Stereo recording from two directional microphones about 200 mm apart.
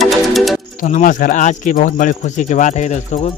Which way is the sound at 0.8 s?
40° left (ahead or behind).